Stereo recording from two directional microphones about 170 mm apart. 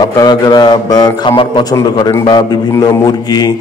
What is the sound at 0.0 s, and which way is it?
A man's voice, 20° left (ahead or behind).